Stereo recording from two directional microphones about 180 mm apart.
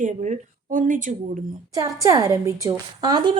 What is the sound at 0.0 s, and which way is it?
A woman's voice, 45° right (ahead or behind).